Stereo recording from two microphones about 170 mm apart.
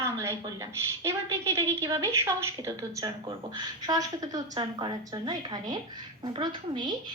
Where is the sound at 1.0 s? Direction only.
15° right (ahead or behind).